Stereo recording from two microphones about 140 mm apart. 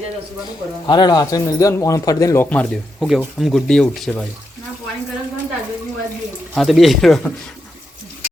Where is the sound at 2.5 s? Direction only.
10° left (ahead or behind).